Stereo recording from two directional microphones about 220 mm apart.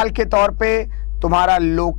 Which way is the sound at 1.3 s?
25° left (ahead or behind).